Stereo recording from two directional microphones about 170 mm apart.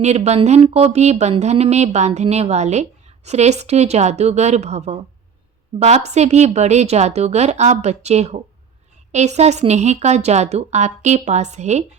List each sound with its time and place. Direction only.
0.0 s speech: 40° right (ahead or behind)